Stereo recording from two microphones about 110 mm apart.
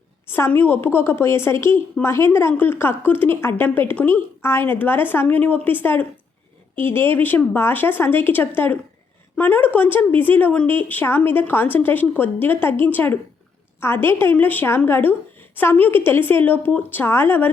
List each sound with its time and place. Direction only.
0.3 s a woman's voice: 20° left (ahead or behind)